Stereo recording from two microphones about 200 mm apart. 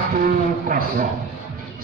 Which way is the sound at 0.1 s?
45° right (ahead or behind).